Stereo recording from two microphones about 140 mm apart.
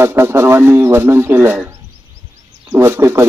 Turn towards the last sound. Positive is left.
turn(degrees=-20)  # may be behind; listen again after turning